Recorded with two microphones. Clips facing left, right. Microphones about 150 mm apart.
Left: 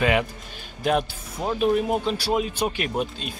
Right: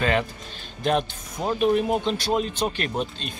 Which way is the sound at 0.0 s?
10° left (ahead or behind).